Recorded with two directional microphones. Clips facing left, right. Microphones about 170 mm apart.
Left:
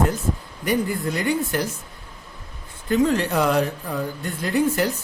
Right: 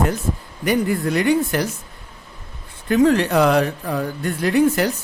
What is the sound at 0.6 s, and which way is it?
Speech, 70° right (ahead or behind).